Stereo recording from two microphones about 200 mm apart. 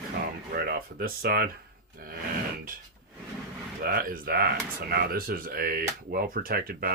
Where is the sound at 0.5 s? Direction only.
50° right (ahead or behind).